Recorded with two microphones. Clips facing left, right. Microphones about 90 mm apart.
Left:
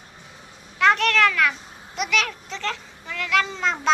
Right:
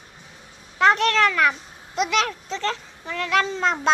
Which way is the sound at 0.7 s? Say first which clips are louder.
Right 1 dB; 30° right (ahead or behind).